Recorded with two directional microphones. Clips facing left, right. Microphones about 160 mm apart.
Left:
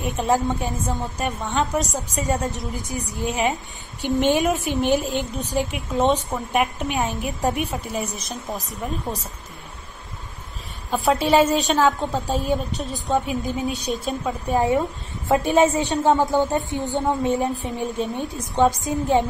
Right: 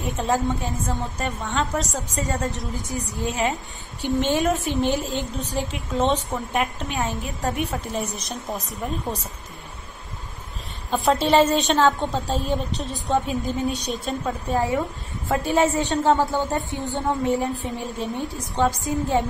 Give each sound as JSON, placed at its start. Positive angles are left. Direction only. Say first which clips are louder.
{"t": 0.0, "sound": "a woman's voice", "louder": "left 2 dB", "side_deg": 15}
{"t": 10.9, "sound": "a woman's voice", "louder": "left 1 dB", "side_deg": 0}